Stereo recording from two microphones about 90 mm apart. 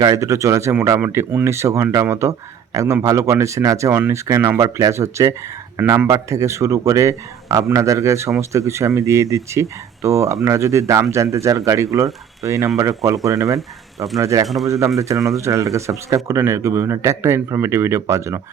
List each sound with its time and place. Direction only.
0.0 s speech: 40° right (ahead or behind)
14.4 s speech: centre (ahead or behind)
14.7 s speech: 35° right (ahead or behind)